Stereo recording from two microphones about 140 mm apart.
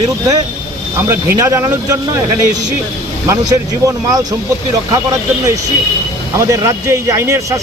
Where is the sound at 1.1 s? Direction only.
20° right (ahead or behind).